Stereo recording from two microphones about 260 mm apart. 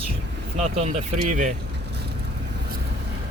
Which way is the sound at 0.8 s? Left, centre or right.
Right.